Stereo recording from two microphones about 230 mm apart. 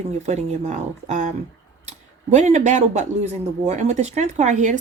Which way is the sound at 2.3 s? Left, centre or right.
Right.